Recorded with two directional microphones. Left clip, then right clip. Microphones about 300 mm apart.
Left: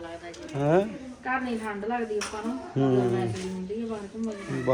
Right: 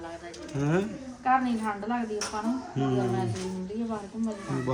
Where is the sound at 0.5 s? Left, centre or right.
Centre.